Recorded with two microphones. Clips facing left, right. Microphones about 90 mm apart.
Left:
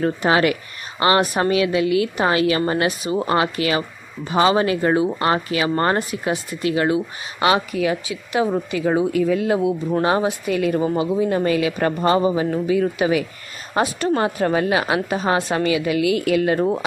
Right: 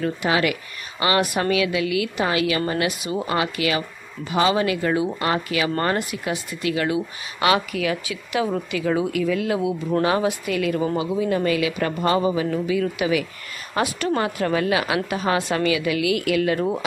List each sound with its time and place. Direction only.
0.0 s a woman's voice: 40° left (ahead or behind)